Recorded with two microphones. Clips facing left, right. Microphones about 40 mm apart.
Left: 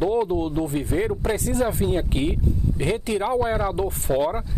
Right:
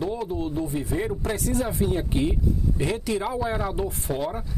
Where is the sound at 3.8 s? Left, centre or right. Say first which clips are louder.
Left 5 dB; left.